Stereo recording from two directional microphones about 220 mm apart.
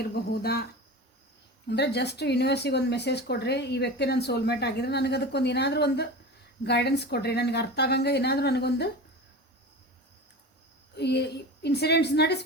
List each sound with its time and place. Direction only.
0.0 s speech: 45° left (ahead or behind)
10.9 s speech: 50° left (ahead or behind)